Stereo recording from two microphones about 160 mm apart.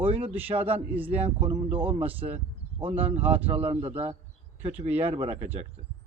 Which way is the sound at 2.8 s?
35° right (ahead or behind).